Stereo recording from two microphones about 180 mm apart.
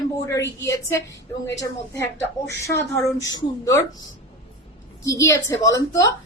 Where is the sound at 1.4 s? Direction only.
15° left (ahead or behind).